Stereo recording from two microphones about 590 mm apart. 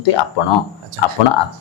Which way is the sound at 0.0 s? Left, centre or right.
Left.